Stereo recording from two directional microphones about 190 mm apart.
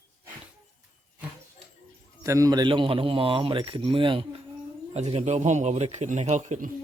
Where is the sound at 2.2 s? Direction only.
15° right (ahead or behind); by 6.7 s 40° right (ahead or behind).